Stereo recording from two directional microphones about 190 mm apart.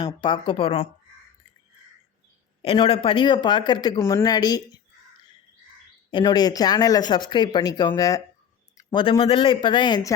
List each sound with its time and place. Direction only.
0.0 s speech: 25° left (ahead or behind)
2.6 s speech: 25° left (ahead or behind)
6.1 s speech: 25° left (ahead or behind)